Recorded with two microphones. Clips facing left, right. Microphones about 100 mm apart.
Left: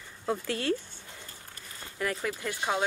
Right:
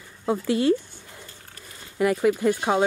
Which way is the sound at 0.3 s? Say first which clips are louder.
Right 8 dB; 15° right (ahead or behind).